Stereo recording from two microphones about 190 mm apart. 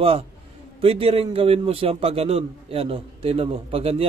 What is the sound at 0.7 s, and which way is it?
A man's voice, 30° right (ahead or behind).